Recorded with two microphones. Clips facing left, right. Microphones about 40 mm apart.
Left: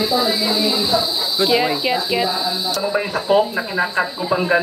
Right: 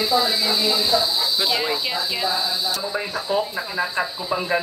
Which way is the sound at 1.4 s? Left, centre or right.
Centre.